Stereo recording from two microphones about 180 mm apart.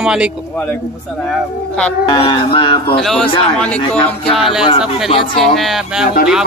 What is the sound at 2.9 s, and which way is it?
Speech, centre (ahead or behind).